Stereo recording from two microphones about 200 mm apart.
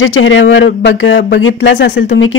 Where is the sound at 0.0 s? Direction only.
75° left (ahead or behind); by 1.9 s 60° left (ahead or behind).